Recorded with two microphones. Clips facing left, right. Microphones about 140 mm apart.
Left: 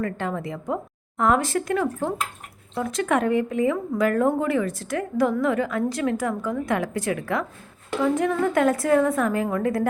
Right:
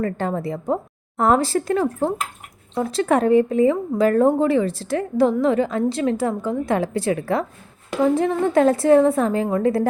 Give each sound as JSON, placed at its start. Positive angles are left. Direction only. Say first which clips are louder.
{"t": 0.0, "sound": "a woman's voice", "louder": "right 4 dB", "side_deg": -35}